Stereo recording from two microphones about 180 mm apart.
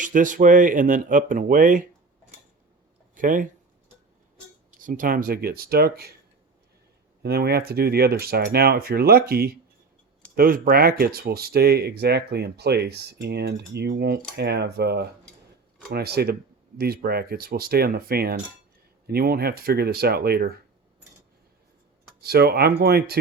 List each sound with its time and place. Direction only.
0.0 s speech: 45° right (ahead or behind)
3.2 s speech: 50° right (ahead or behind)
4.8 s speech: 45° right (ahead or behind)
7.2 s speech: 60° right (ahead or behind)
22.2 s speech: 60° right (ahead or behind)